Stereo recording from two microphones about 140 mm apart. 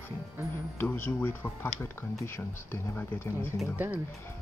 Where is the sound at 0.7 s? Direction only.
15° left (ahead or behind).